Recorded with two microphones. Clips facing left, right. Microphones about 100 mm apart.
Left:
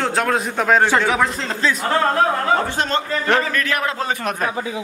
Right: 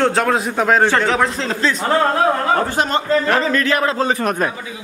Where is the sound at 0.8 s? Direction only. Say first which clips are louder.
Right 1 dB; 10° left (ahead or behind).